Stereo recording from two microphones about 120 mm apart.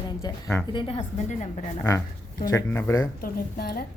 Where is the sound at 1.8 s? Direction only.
20° left (ahead or behind).